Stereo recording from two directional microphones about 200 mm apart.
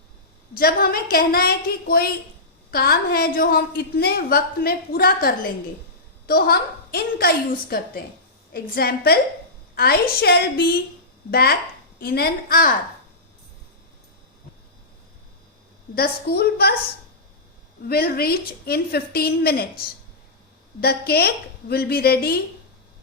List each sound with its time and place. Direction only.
0.5 s a woman's voice: 50° left (ahead or behind)
16.0 s a woman's voice: 55° left (ahead or behind)
17.8 s a woman's voice: 50° left (ahead or behind)
20.8 s a woman's voice: 50° left (ahead or behind)